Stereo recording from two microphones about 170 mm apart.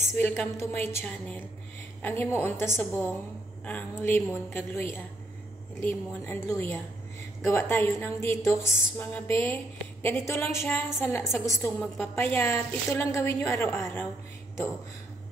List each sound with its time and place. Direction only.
0.1 s a woman's voice: 10° left (ahead or behind)